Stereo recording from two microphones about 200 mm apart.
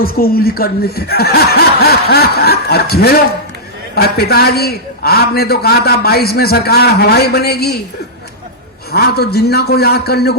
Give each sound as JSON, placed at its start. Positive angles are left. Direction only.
{"t": 0.0, "sound": "a man's voice", "side_deg": 50}
{"t": 8.9, "sound": "a man's voice", "side_deg": 50}